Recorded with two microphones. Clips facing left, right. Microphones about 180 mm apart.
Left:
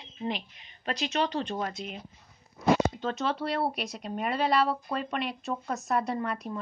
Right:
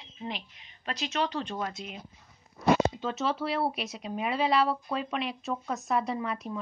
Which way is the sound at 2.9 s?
5° right (ahead or behind).